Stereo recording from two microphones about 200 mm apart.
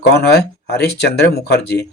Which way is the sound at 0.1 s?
55° left (ahead or behind).